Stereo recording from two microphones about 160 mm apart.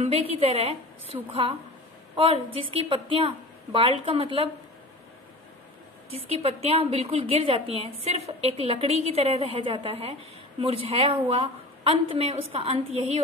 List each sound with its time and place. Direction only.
0.0 s a woman's voice: 40° right (ahead or behind)
6.0 s a woman's voice: 40° right (ahead or behind)